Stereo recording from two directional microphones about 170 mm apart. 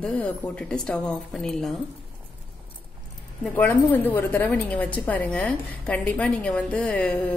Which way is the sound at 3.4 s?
10° left (ahead or behind).